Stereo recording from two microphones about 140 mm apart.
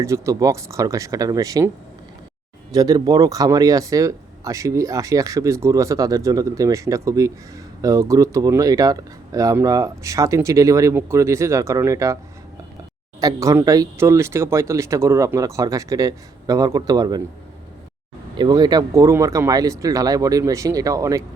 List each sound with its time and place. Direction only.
0.0 s speech: 20° right (ahead or behind)
2.7 s speech: 25° right (ahead or behind)
13.1 s speech: 25° right (ahead or behind)
18.3 s speech: 30° right (ahead or behind)